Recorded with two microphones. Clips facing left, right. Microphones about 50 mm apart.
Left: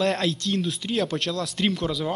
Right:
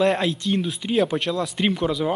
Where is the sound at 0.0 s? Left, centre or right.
Centre.